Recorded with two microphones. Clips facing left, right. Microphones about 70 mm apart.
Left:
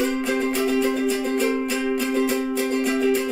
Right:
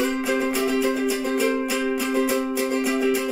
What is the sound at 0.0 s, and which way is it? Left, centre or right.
Music, centre.